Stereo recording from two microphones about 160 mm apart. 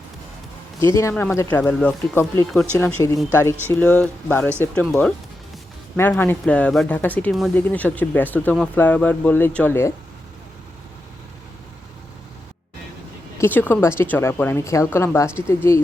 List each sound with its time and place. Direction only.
0.8 s speech: 20° left (ahead or behind)
13.4 s speech: 10° left (ahead or behind)